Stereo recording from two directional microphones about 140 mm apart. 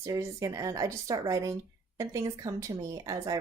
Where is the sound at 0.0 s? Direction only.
25° right (ahead or behind).